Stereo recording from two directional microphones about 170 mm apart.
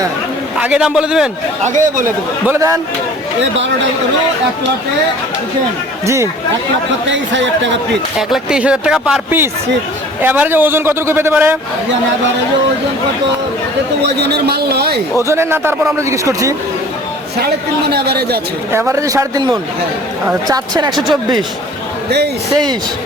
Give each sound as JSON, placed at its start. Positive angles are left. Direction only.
{"t": 0.6, "sound": "speech", "side_deg": -5}
{"t": 1.6, "sound": "speech", "side_deg": -50}
{"t": 2.0, "sound": "a man's voice", "side_deg": -15}
{"t": 7.1, "sound": "speech", "side_deg": -90}
{"t": 8.3, "sound": "a man's voice", "side_deg": -5}
{"t": 14.0, "sound": "a man's voice", "side_deg": -75}
{"t": 15.2, "sound": "a man's voice", "side_deg": -15}
{"t": 17.4, "sound": "a man's voice", "side_deg": -70}
{"t": 18.7, "sound": "a man's voice", "side_deg": -15}